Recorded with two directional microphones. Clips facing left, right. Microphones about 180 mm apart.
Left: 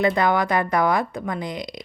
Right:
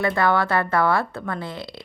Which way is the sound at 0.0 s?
20° left (ahead or behind).